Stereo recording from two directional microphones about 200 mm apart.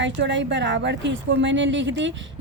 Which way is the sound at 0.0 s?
65° right (ahead or behind).